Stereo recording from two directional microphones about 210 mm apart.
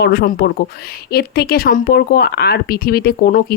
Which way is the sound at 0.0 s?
50° left (ahead or behind).